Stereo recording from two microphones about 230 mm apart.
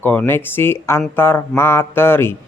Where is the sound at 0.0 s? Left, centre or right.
Centre.